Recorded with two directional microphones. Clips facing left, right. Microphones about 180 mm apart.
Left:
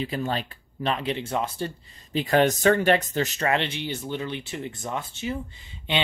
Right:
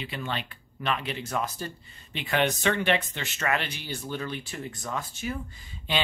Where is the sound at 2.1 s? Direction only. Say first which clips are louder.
Left 6 dB; 40° left (ahead or behind).